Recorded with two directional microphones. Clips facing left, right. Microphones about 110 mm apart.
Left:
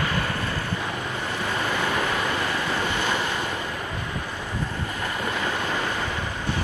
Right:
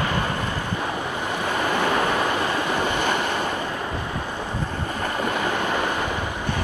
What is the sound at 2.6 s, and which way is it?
Waves, 15° right (ahead or behind).